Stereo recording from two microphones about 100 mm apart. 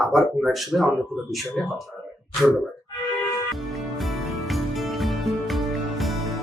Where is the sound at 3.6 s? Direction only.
Centre (ahead or behind).